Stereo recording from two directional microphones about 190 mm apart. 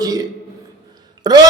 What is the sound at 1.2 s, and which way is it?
Speech, 20° right (ahead or behind).